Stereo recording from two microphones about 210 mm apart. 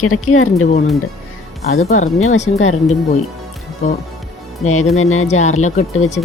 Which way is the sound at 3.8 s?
35° left (ahead or behind).